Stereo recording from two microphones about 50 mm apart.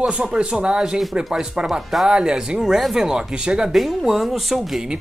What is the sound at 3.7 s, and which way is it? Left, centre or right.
Speech, centre.